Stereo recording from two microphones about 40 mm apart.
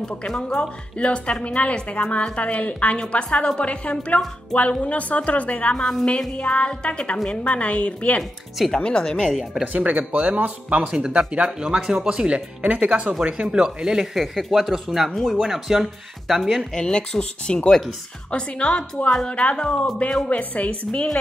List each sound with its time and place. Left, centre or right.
0.3 s a woman's voice: centre; by 5.8 s left
5.8 s speech: centre
6.3 s a woman's voice: left
8.2 s speech: centre
8.8 s speech: left
9.7 s speech: right
10.9 s speech: right
11.6 s speech: centre
12.4 s speech: right
13.5 s speech: centre
16.7 s speech: left
17.6 s speech: centre
18.3 s a woman's voice: left